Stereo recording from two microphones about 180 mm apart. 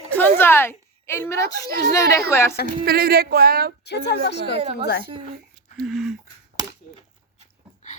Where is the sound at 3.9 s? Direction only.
70° left (ahead or behind).